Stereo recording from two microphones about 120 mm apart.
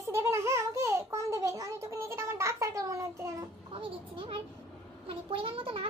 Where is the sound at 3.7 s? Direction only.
50° right (ahead or behind).